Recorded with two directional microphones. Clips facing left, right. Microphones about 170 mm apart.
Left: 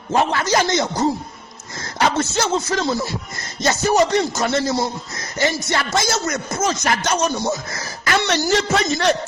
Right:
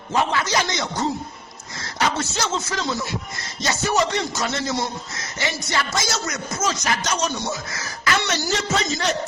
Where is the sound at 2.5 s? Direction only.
40° left (ahead or behind).